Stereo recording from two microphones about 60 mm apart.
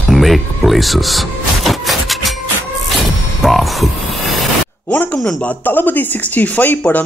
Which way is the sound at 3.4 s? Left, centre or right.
Centre.